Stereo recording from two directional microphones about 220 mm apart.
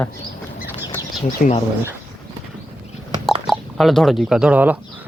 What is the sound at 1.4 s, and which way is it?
Speech, 40° left (ahead or behind).